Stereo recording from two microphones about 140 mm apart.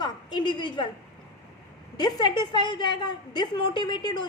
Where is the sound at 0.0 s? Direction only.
35° left (ahead or behind).